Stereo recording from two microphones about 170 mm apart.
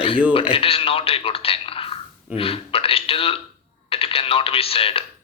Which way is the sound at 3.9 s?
35° left (ahead or behind).